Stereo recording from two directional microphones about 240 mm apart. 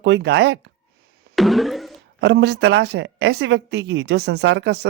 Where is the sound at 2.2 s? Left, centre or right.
Right.